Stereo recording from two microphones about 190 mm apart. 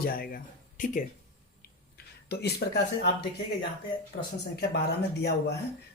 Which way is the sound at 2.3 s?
60° left (ahead or behind).